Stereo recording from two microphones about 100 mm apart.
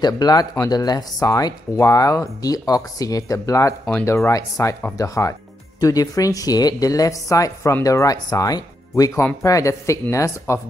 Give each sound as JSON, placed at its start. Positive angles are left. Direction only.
{"t": 0.0, "sound": "speech", "side_deg": 40}